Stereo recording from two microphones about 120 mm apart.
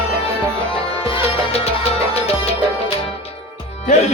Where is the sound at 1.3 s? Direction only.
55° left (ahead or behind).